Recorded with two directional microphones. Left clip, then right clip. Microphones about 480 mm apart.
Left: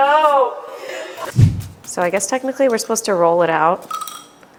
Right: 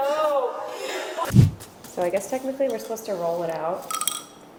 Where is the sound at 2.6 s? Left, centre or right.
Left.